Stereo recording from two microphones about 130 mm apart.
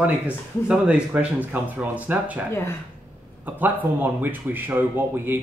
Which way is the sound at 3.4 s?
15° right (ahead or behind).